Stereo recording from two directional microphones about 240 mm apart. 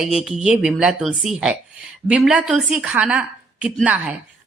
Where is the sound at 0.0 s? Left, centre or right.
Centre.